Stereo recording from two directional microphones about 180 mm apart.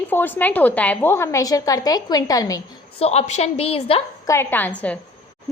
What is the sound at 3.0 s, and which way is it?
A woman's voice, 35° left (ahead or behind).